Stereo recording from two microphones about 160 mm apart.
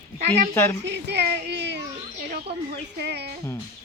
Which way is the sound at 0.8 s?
90° right.